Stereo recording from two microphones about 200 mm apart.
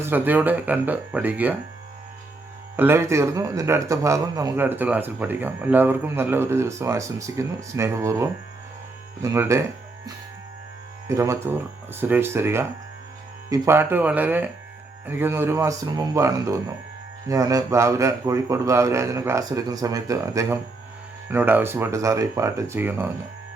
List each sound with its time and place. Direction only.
0.0 s speech: 10° right (ahead or behind)
2.7 s speech: 10° right (ahead or behind)
11.1 s speech: 15° right (ahead or behind)